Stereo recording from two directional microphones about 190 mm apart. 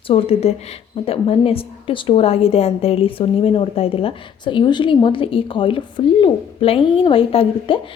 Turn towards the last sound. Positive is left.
turn(degrees=30)  # may be behind; listen again after turning